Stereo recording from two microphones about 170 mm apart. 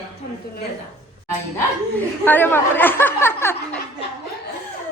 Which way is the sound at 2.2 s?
10° left (ahead or behind).